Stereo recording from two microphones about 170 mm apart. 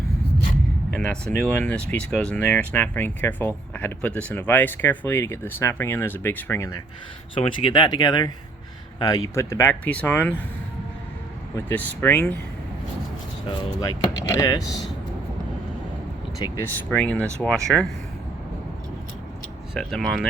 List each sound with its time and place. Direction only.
0.9 s speech: 5° left (ahead or behind)
7.3 s speech: 30° left (ahead or behind); by 10.3 s 10° left (ahead or behind)
11.5 s speech: 10° left (ahead or behind)
13.8 s speech: 20° left (ahead or behind)
16.4 s speech: 15° left (ahead or behind)
19.7 s speech: centre (ahead or behind)